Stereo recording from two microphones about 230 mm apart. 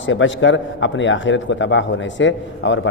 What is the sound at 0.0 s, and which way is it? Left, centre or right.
A man's voice, left.